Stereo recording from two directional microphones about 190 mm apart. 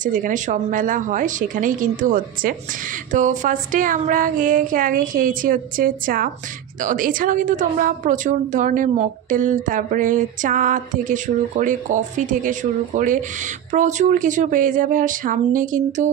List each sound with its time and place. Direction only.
0.0 s a woman's voice: 45° right (ahead or behind)